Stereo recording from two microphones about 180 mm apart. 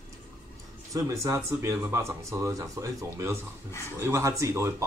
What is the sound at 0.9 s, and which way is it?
Speech, 15° right (ahead or behind).